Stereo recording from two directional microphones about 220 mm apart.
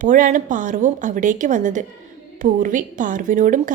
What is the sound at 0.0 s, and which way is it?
A woman's voice, 35° right (ahead or behind).